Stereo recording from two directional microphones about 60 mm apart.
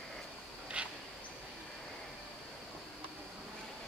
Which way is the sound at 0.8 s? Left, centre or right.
Right.